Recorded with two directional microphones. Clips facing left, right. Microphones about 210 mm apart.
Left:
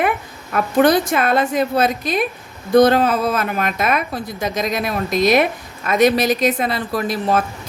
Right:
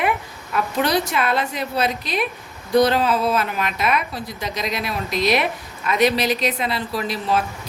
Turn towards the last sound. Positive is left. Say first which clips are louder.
# left 4 dB
turn(degrees=50)  # may be behind; listen again after turning